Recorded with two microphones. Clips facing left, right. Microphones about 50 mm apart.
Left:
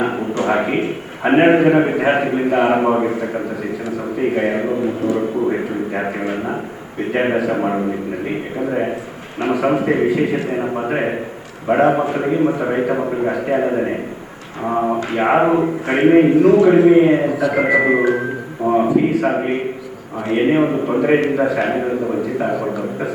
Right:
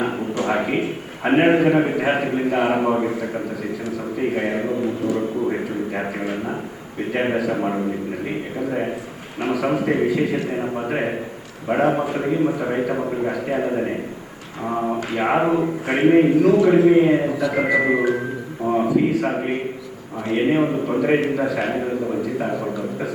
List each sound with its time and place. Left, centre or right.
0.3 s a sound: centre
0.6 s a man's voice: centre
3.1 s a man's voice: centre
15.9 s a man's voice: centre
16.1 s a man's voice: centre
16.4 s a man's voice: centre
17.2 s speech: left
17.7 s a man's voice: left
18.6 s a sound: centre
19.1 s a man's voice: centre
19.4 s a man's voice: centre
21.5 s a man's voice: centre
21.8 s a man's voice: left